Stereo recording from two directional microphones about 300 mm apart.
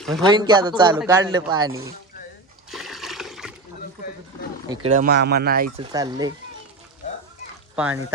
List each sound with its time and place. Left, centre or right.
0.0 s speech: centre
0.3 s a man's voice: centre
2.6 s toilet flush: centre
4.9 s speech: right; by 6.3 s centre
7.8 s speech: centre